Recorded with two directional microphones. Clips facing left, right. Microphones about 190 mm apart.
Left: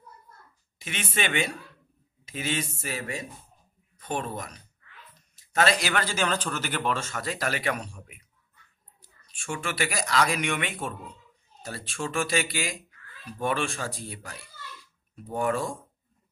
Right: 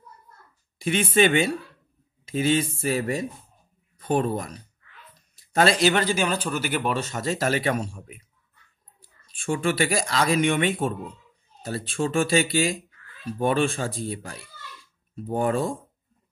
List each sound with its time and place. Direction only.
0.7 s speech: 35° right (ahead or behind)
9.4 s speech: 30° right (ahead or behind)